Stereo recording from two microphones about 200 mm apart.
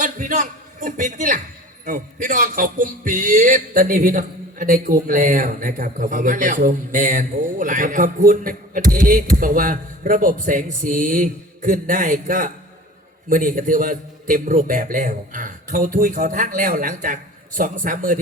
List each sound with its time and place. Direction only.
0.0 s a man's voice: 40° right (ahead or behind)